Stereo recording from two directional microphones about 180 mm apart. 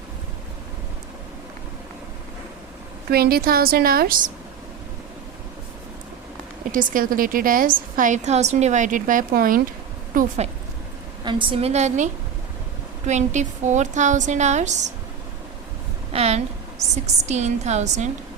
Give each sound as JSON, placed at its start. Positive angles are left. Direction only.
{"t": 3.1, "sound": "a woman's voice", "side_deg": -60}
{"t": 6.7, "sound": "a woman's voice", "side_deg": -50}
{"t": 10.2, "sound": "a woman's voice", "side_deg": -35}
{"t": 11.2, "sound": "a woman's voice", "side_deg": -25}
{"t": 16.1, "sound": "a woman's voice", "side_deg": -35}